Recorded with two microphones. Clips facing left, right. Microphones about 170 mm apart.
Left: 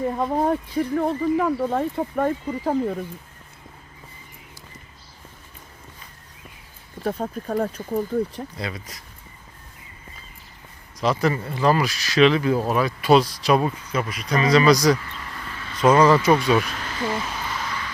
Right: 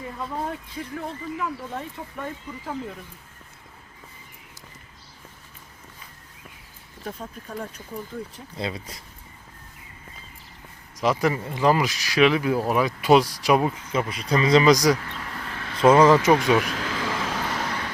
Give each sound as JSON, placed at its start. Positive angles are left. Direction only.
{"t": 0.0, "sound": "speech", "side_deg": 50}
{"t": 7.1, "sound": "speech", "side_deg": 55}
{"t": 8.5, "sound": "speech", "side_deg": -25}
{"t": 11.0, "sound": "speech", "side_deg": -15}
{"t": 15.1, "sound": "vehicle", "side_deg": -65}
{"t": 15.8, "sound": "speech", "side_deg": -25}
{"t": 16.6, "sound": "vehicle", "side_deg": -90}